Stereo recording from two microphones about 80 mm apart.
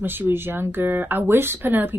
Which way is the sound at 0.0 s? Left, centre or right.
Right.